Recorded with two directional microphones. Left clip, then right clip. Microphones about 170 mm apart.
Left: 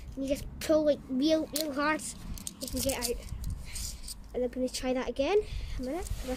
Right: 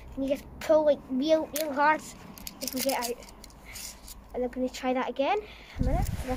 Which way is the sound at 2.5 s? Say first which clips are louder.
Right 4 dB; 35° right (ahead or behind).